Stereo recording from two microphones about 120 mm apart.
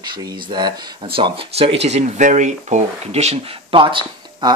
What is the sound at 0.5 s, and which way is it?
Speech, 40° right (ahead or behind).